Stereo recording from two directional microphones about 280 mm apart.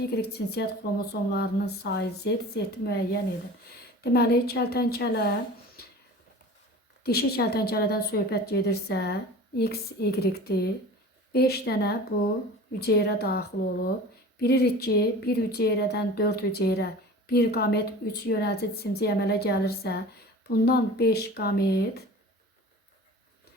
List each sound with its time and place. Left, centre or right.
0.2 s speech: left
5.8 s a sound: left
7.0 s speech: left